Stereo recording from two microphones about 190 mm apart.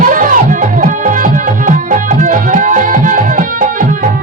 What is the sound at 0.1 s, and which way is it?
Music, 45° right (ahead or behind).